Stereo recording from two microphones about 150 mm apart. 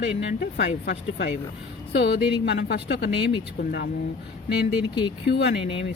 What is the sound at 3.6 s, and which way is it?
Speech, 80° left.